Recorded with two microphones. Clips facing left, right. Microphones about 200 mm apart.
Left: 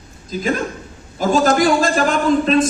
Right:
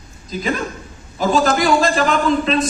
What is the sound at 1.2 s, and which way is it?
Speech, 45° left (ahead or behind).